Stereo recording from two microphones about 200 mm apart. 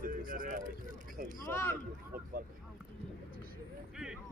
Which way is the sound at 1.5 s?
10° left (ahead or behind).